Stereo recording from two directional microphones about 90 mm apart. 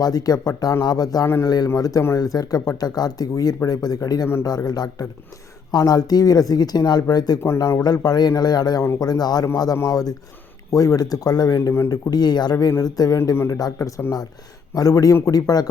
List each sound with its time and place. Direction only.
0.0 s speech: 45° left (ahead or behind)